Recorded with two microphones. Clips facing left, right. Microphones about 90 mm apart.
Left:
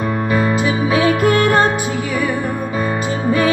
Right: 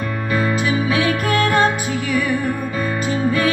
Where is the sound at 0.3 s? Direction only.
30° left (ahead or behind).